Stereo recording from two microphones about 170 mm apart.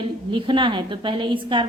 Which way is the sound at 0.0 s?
30° right (ahead or behind).